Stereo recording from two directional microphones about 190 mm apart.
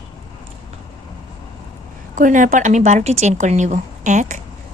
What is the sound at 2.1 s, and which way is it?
A woman's voice, 45° right (ahead or behind).